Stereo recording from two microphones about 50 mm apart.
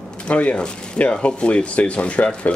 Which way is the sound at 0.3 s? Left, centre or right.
Left.